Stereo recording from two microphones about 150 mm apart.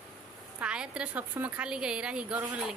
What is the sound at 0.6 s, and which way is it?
A woman's voice, 5° right (ahead or behind).